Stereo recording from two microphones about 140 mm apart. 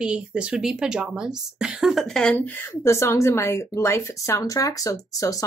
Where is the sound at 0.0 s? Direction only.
10° right (ahead or behind).